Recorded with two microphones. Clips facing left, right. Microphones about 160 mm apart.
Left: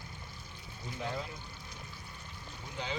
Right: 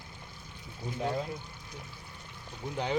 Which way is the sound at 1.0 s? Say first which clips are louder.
Right 6 dB; 35° right (ahead or behind).